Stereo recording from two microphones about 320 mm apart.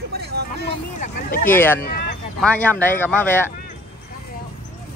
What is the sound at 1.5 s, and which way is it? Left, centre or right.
Speech, centre.